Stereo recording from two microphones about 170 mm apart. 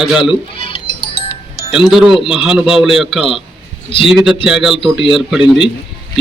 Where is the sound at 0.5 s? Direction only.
30° left (ahead or behind).